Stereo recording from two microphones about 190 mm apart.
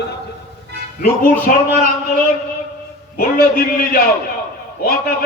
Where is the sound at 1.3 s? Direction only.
45° left (ahead or behind).